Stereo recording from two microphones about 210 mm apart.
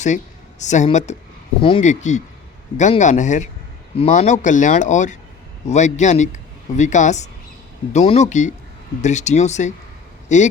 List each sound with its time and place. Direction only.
0.6 s a man's voice: 35° left (ahead or behind)